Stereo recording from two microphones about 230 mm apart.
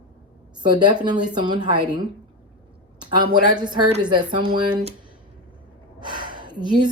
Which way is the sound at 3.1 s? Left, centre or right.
Centre.